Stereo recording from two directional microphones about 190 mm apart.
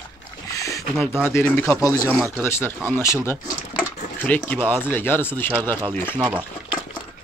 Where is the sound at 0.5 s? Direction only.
15° left (ahead or behind).